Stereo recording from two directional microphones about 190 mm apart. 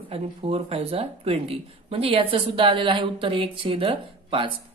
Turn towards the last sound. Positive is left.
turn(degrees=-30)  # may be behind; listen again after turning